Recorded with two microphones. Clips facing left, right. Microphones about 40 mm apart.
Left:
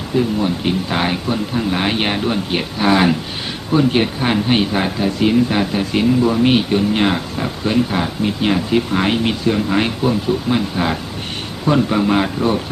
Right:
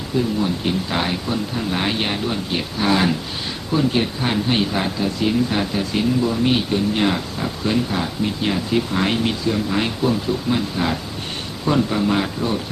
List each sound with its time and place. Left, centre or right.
0.3 s speech: left